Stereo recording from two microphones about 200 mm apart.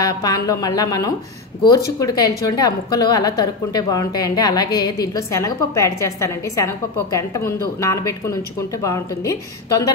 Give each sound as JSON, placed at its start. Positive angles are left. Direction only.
{"t": 0.0, "sound": "a woman's voice", "side_deg": 20}